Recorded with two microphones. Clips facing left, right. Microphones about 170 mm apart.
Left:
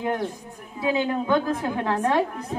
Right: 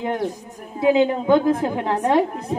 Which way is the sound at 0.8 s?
20° right (ahead or behind).